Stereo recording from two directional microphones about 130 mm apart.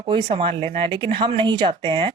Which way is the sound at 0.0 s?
40° right (ahead or behind).